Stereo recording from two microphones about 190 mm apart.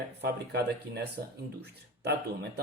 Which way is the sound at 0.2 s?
60° right (ahead or behind).